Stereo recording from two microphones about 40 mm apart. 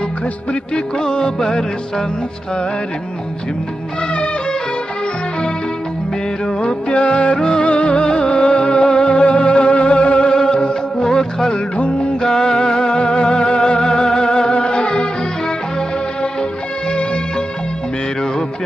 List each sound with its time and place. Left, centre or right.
0.5 s music: left
4.1 s music: left
6.6 s music: left
7.3 s music: centre
7.6 s music: left
11.7 s music: left
12.2 s music: centre